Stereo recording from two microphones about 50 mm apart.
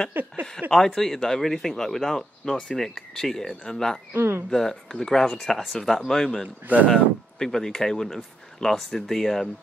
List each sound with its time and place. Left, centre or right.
0.1 s speech: right
0.7 s speech: centre
4.1 s speech: right
4.5 s speech: centre